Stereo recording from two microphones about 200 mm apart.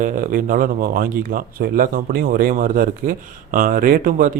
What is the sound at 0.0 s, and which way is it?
Speech, 40° right (ahead or behind).